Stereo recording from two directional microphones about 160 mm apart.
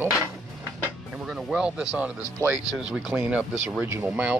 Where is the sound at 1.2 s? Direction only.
5° right (ahead or behind).